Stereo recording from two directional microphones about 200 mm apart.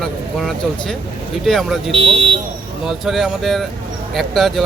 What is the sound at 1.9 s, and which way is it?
Speech, 30° right (ahead or behind).